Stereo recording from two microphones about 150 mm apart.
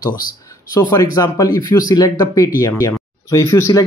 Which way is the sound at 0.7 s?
20° left (ahead or behind).